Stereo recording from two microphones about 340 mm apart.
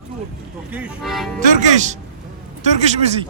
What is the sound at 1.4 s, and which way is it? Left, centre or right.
Speech, right.